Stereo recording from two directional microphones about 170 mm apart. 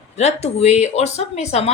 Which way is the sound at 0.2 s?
40° left (ahead or behind).